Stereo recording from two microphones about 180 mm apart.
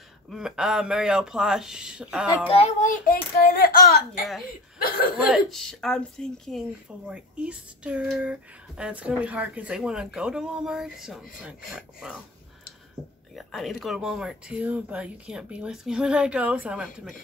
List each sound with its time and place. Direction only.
0.3 s speech: 5° right (ahead or behind)
2.5 s a child's voice: 40° left (ahead or behind); by 4.0 s 60° left (ahead or behind)
5.1 s speech: 5° right (ahead or behind)
13.4 s speech: centre (ahead or behind)